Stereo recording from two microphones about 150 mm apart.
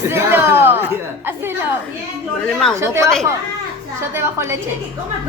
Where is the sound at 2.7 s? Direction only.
20° right (ahead or behind).